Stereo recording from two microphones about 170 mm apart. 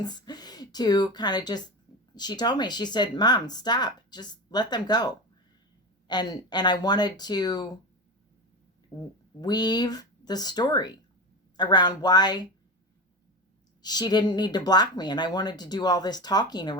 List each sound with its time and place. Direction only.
0.0 s speech: 25° left (ahead or behind)
8.9 s speech: 15° left (ahead or behind)
13.8 s speech: 25° left (ahead or behind)